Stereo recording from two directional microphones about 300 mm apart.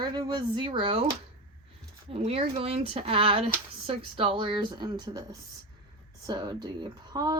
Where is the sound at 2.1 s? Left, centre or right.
Centre.